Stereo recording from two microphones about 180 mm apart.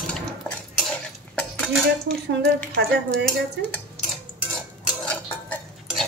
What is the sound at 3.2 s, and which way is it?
Dishes, 5° left (ahead or behind).